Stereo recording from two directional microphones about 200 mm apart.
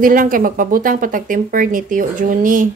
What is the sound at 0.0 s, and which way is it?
Speech, 45° right (ahead or behind).